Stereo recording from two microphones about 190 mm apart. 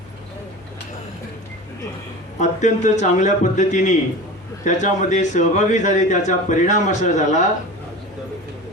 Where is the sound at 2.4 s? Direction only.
40° left (ahead or behind).